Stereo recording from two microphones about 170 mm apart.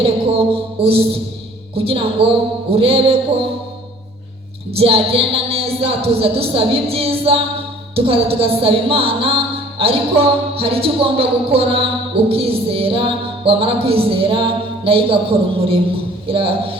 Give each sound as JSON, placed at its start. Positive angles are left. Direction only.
{"t": 0.0, "sound": "a woman's voice", "side_deg": -35}
{"t": 1.7, "sound": "music", "side_deg": -35}
{"t": 4.7, "sound": "music", "side_deg": -35}
{"t": 16.2, "sound": "a man's voice", "side_deg": -30}